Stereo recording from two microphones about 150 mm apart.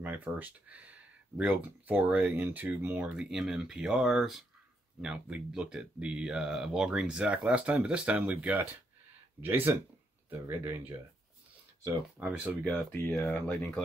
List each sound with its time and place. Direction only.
0.0 s speech: 10° right (ahead or behind)
12.2 s speech: 10° right (ahead or behind)